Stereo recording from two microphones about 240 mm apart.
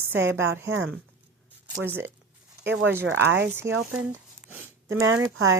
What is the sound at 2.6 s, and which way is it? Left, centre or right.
Speech, right.